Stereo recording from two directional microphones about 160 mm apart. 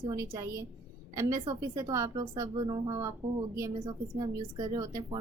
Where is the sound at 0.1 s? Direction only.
20° right (ahead or behind).